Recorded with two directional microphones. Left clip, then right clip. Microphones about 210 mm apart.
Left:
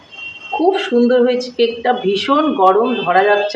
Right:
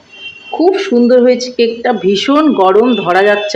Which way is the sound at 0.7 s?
35° right (ahead or behind).